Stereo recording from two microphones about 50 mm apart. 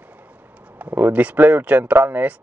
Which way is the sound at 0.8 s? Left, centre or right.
Right.